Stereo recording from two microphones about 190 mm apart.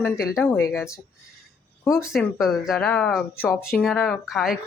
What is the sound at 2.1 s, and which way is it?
Speech, centre (ahead or behind).